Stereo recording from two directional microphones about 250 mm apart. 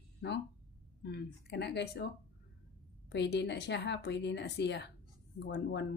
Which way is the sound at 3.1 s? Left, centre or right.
Left.